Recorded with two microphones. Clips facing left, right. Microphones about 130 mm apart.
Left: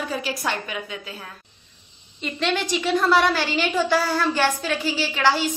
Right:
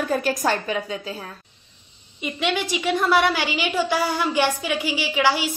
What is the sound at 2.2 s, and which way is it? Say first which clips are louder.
A woman's voice: even; 10° right (ahead or behind).